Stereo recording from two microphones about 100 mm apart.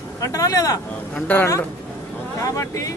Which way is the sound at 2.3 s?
30° left (ahead or behind).